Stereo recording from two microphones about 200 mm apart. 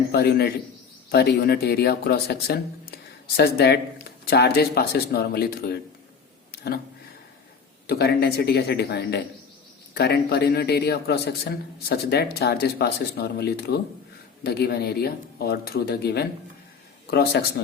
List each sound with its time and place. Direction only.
0.1 s speech: 55° left (ahead or behind)
7.9 s speech: 55° left (ahead or behind)